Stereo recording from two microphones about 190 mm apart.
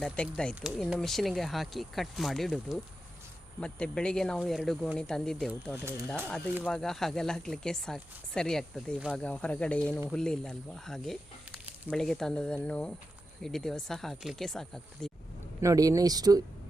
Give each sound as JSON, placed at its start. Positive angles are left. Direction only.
{"t": 0.0, "sound": "speech", "side_deg": 5}
{"t": 5.7, "sound": "speech", "side_deg": -15}
{"t": 6.7, "sound": "speech", "side_deg": 5}
{"t": 15.6, "sound": "speech", "side_deg": -15}